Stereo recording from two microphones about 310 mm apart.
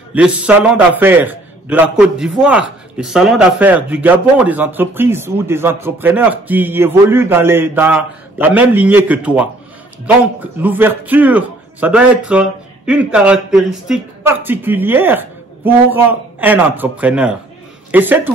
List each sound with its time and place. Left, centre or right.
0.1 s a man's voice: centre